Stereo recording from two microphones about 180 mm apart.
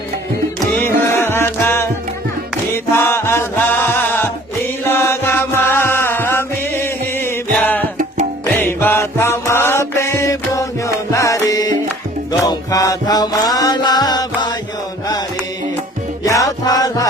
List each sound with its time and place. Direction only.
0.7 s music: 15° left (ahead or behind)
16.2 s music: 20° left (ahead or behind)